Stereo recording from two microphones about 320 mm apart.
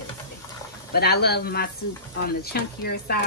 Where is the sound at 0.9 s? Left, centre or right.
Left.